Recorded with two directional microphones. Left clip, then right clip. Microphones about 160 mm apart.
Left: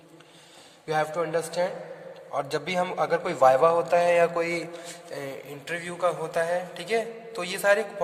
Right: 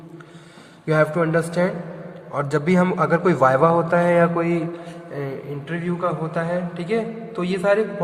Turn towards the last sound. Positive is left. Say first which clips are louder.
# right 4 dB
turn(degrees=60)  # may be behind; listen again after turning